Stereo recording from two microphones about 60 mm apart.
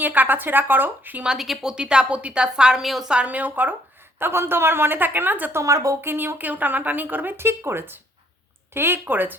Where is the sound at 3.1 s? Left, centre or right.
Right.